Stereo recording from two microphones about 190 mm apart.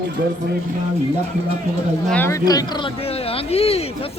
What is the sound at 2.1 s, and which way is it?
Speech, 15° left (ahead or behind).